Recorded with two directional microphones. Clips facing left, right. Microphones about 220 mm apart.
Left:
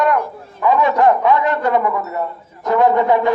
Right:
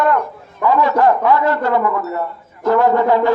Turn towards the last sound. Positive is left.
turn(degrees=20)  # may be behind; listen again after turning